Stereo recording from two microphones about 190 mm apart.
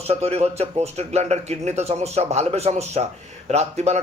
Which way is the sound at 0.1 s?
35° right (ahead or behind).